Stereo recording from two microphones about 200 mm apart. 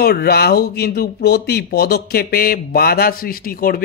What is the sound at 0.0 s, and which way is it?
Speech, 50° left (ahead or behind).